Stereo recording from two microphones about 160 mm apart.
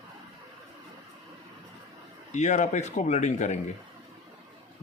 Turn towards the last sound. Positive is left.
turn(degrees=45)  # may be behind; listen again after turning